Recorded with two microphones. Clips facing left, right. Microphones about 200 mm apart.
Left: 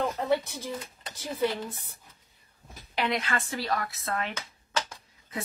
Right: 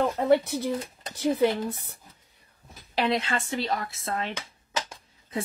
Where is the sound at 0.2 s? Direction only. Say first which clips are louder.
Right 6 dB; 65° right (ahead or behind).